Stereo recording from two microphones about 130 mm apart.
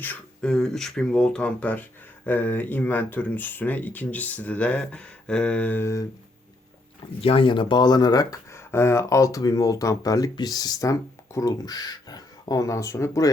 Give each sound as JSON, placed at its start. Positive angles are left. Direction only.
{"t": 0.0, "sound": "speech", "side_deg": 10}
{"t": 7.2, "sound": "speech", "side_deg": 45}